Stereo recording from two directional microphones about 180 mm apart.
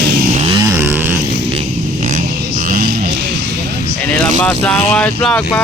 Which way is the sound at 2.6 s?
50° right (ahead or behind).